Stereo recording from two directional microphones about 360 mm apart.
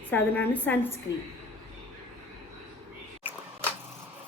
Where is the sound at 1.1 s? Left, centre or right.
Left.